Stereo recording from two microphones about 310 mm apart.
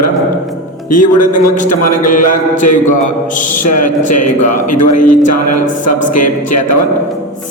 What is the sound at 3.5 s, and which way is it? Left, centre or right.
A man's voice, left.